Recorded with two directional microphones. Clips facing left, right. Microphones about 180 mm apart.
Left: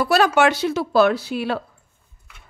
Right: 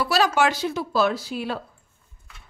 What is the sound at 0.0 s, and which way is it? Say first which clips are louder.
Speech: left 4 dB; 55° left (ahead or behind).